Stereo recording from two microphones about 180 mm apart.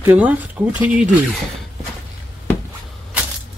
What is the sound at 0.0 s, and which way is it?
Speech, 10° right (ahead or behind).